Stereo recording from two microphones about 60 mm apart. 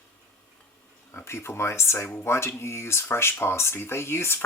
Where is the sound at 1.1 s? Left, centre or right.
Left.